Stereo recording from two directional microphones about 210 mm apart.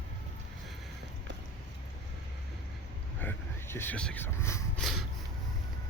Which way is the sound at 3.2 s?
10° left (ahead or behind).